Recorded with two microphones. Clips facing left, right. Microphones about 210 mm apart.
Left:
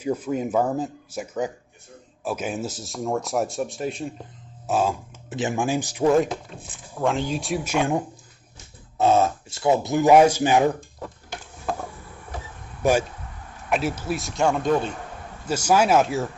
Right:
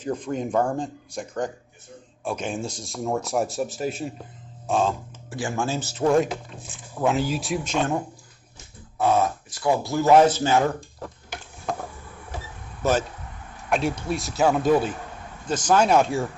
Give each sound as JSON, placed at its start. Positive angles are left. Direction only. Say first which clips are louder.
{"t": 0.0, "sound": "speech", "louder": "left 2 dB", "side_deg": 10}
{"t": 5.3, "sound": "speech", "louder": "left 3 dB", "side_deg": 20}
{"t": 7.0, "sound": "speech", "louder": "right 1 dB", "side_deg": -5}
{"t": 9.0, "sound": "speech", "louder": "left 2 dB", "side_deg": 25}
{"t": 12.8, "sound": "speech", "louder": "left 2 dB", "side_deg": 10}
{"t": 15.4, "sound": "speech", "louder": "even", "side_deg": 10}